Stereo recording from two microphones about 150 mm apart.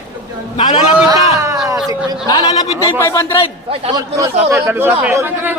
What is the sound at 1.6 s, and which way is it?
Speech, 25° right (ahead or behind).